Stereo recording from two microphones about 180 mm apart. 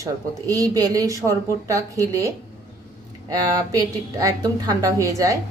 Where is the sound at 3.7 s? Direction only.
20° right (ahead or behind).